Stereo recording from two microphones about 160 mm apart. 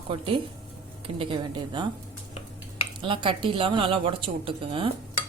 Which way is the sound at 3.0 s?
30° right (ahead or behind).